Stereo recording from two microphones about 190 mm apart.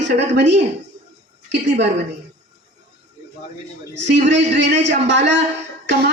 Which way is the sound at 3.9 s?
70° right (ahead or behind).